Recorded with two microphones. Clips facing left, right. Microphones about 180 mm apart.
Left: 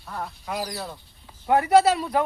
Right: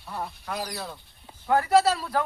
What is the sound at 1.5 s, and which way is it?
Speech, 20° left (ahead or behind).